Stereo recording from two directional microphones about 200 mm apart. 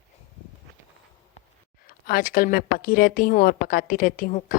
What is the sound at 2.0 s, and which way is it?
A woman's voice, 45° left (ahead or behind).